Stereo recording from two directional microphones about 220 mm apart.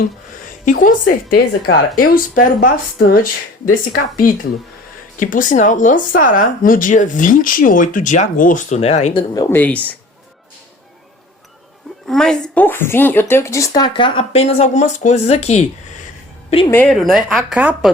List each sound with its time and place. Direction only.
0.6 s speech: 35° left (ahead or behind)
9.3 s speech: 15° left (ahead or behind)
12.0 s speech: 5° left (ahead or behind); by 16.7 s 25° left (ahead or behind)
16.7 s speech: 5° left (ahead or behind)